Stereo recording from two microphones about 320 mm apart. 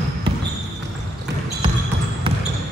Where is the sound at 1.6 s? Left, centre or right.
Centre.